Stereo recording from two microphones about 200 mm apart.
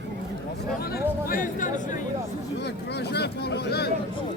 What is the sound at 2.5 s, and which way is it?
Speech, 55° left (ahead or behind).